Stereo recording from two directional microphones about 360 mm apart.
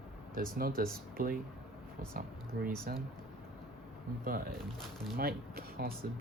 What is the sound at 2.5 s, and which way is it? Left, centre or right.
Speech, right.